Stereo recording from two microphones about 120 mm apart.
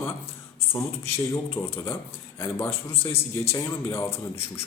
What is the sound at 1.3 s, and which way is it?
Speech, 20° left (ahead or behind).